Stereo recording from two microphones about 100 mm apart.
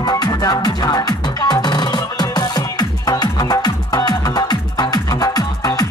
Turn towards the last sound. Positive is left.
turn(degrees=40)  # may be behind; listen again after turning